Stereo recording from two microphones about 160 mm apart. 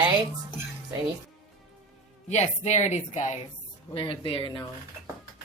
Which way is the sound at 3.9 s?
35° left (ahead or behind).